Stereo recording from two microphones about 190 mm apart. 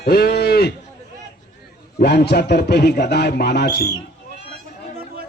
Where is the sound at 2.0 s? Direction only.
60° left (ahead or behind).